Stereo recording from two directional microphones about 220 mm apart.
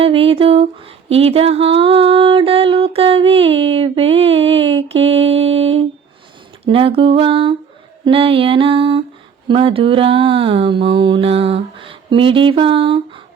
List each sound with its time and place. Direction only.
0.0 s speech: 25° right (ahead or behind)
1.1 s music: 25° right (ahead or behind)